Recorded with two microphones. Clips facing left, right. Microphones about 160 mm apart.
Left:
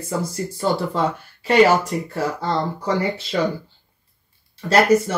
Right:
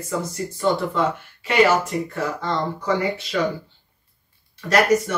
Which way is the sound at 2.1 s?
30° left (ahead or behind).